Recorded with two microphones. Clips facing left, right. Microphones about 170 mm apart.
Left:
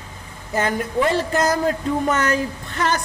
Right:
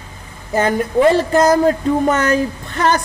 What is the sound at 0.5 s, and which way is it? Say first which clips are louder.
A man's voice: right 6 dB; 35° right (ahead or behind).